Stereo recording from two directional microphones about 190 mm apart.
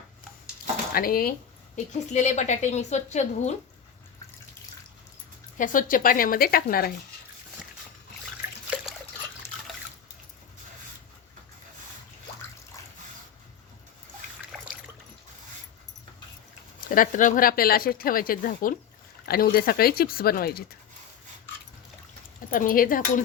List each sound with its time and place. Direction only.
0.9 s speech: 50° left (ahead or behind)
1.7 s a woman's voice: 40° left (ahead or behind)
5.5 s speech: 45° left (ahead or behind)
16.9 s speech: 45° left (ahead or behind)
22.4 s speech: 45° left (ahead or behind)